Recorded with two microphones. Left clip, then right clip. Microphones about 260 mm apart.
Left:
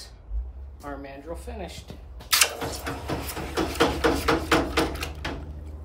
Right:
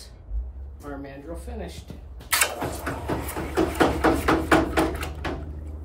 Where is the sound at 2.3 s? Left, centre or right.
Centre.